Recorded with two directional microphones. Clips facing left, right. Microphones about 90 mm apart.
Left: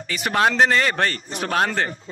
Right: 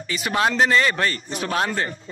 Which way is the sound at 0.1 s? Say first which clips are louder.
Left 2 dB; 55° left (ahead or behind).